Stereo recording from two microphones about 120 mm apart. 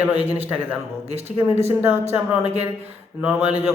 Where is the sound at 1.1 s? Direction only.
60° right (ahead or behind).